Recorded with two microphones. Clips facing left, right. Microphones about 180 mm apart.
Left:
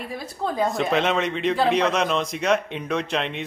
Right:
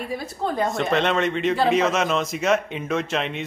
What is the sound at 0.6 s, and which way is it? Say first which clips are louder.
A man's voice: even; centre (ahead or behind).